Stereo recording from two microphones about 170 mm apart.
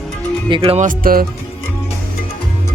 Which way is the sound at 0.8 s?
55° right (ahead or behind).